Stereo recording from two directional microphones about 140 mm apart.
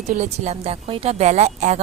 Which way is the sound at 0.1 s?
55° right (ahead or behind).